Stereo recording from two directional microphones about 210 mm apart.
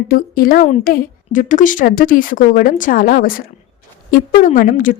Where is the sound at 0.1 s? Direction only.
45° left (ahead or behind).